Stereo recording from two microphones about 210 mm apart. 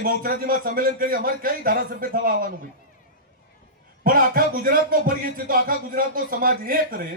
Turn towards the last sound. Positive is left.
turn(degrees=-45)  # may be behind; listen again after turning